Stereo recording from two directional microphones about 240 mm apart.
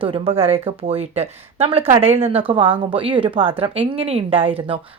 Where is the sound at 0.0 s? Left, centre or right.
Right.